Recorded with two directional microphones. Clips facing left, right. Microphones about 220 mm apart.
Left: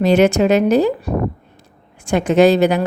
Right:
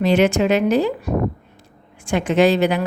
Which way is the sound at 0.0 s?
40° left (ahead or behind).